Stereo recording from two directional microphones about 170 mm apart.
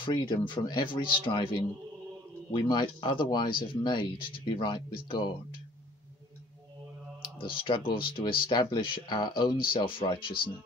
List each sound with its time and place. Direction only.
0.0 s speech: 30° left (ahead or behind)
7.3 s speech: 30° left (ahead or behind)